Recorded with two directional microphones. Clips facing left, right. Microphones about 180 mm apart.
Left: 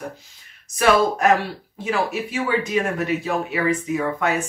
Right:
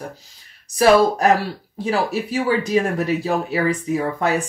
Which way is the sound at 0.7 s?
35° right (ahead or behind).